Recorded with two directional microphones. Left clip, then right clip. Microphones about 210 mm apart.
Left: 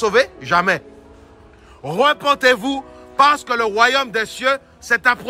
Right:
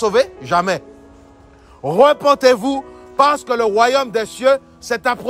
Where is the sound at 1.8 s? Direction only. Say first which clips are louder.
Right 4 dB; 40° right (ahead or behind).